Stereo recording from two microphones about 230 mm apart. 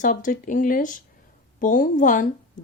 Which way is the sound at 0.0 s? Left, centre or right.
Left.